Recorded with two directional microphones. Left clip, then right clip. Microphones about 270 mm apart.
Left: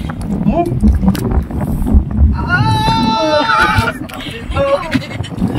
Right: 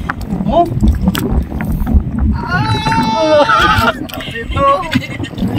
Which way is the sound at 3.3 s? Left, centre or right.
Right.